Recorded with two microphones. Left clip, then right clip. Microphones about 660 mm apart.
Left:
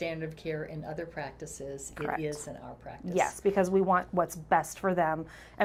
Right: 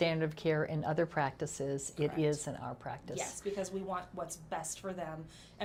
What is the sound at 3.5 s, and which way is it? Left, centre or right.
A woman's voice, left.